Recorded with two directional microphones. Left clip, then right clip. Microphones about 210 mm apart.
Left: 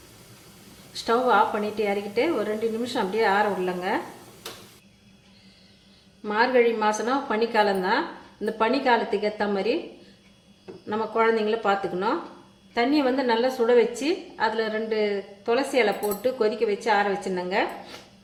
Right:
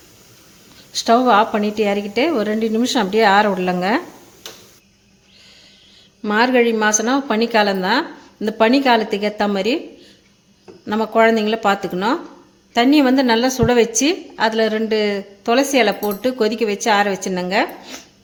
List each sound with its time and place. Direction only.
0.9 s a woman's voice: 50° right (ahead or behind)
6.2 s a woman's voice: 50° right (ahead or behind)
10.8 s a woman's voice: 55° right (ahead or behind)